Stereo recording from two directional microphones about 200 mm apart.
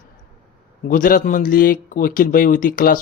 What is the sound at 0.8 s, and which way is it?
Speech, 45° left (ahead or behind).